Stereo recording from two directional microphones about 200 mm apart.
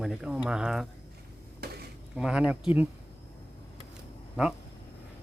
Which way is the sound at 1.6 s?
50° right (ahead or behind).